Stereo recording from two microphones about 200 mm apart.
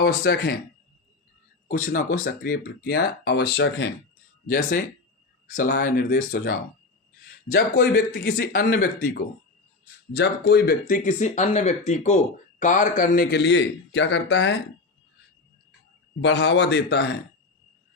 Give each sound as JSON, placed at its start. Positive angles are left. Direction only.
{"t": 0.0, "sound": "a man's voice", "side_deg": 55}
{"t": 1.6, "sound": "a man's voice", "side_deg": 40}
{"t": 4.4, "sound": "a man's voice", "side_deg": 45}
{"t": 16.2, "sound": "speech", "side_deg": 60}